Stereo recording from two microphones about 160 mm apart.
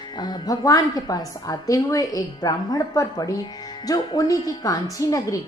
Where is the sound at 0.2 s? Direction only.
25° left (ahead or behind).